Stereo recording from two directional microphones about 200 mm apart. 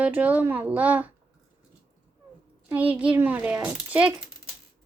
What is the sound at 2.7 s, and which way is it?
Speech, 10° right (ahead or behind).